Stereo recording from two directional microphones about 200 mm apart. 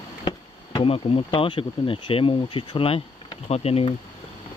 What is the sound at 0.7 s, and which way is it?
Speech, 25° left (ahead or behind).